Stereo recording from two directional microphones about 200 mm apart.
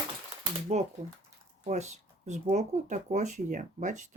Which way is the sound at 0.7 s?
35° right (ahead or behind).